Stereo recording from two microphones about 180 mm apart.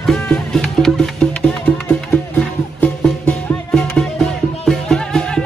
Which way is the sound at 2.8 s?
5° left (ahead or behind).